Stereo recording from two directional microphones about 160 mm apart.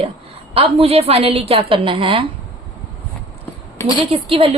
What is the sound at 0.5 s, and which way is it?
A woman's voice, 35° right (ahead or behind).